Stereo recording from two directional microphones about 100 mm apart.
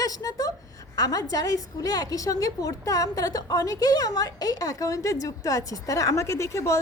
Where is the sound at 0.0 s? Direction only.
40° left (ahead or behind).